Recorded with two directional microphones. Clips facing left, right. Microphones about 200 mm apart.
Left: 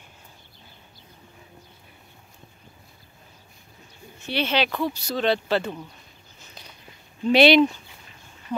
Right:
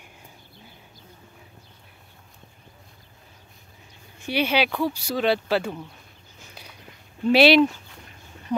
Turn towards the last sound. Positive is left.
turn(degrees=-5)  # may be behind; listen again after turning